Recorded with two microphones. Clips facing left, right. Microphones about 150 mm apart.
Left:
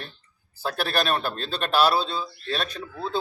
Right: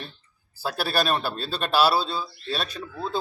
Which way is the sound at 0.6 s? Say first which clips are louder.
Even; 5° right (ahead or behind).